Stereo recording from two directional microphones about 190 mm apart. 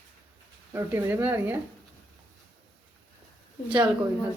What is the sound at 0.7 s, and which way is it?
Speech, 10° right (ahead or behind).